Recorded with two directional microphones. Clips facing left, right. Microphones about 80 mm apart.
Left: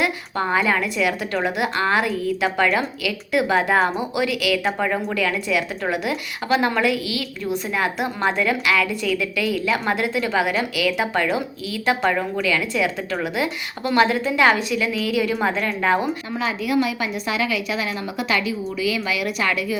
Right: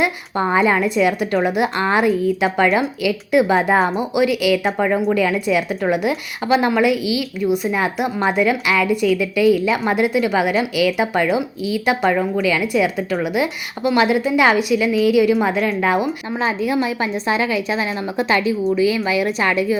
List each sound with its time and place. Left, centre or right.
0.0 s a woman's voice: right
16.4 s a woman's voice: right